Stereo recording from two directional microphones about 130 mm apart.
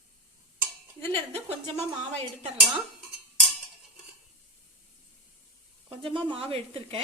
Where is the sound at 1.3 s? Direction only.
50° right (ahead or behind).